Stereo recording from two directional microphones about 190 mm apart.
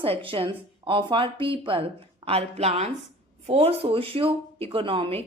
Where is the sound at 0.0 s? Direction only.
30° right (ahead or behind).